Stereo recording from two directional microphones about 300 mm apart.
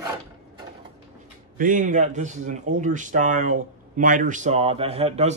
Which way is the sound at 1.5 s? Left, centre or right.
Right.